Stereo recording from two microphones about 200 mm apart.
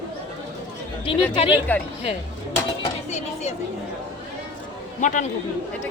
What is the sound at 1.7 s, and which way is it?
Speech, 10° left (ahead or behind).